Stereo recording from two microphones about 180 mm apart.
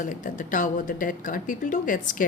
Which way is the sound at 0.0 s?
45° left (ahead or behind).